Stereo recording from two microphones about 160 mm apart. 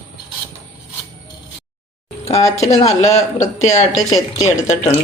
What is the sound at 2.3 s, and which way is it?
Speech, 40° left (ahead or behind).